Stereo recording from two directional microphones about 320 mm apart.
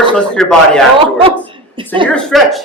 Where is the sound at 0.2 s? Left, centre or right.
Centre.